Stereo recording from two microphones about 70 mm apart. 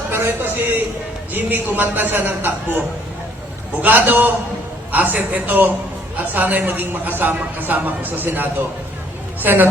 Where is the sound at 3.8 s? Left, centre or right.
Right.